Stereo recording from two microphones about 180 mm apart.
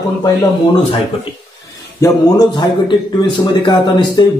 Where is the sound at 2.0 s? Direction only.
20° left (ahead or behind).